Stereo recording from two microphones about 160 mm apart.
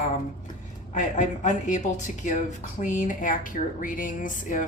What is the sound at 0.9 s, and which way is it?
A woman's voice, 50° left (ahead or behind).